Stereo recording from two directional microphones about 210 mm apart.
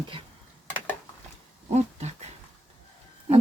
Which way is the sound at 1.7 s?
35° right (ahead or behind).